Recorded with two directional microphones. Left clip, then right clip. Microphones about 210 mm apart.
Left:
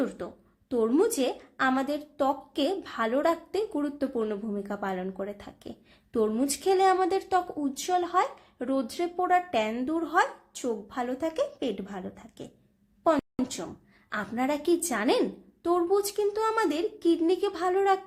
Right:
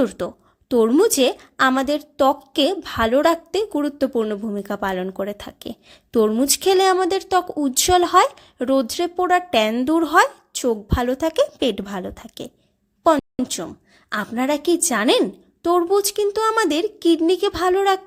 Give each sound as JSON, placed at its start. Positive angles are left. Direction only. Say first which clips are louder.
{"t": 0.2, "sound": "a woman's voice", "louder": "right 12 dB", "side_deg": -40}